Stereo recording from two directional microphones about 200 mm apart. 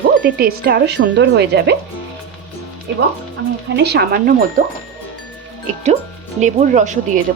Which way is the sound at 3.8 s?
55° right (ahead or behind).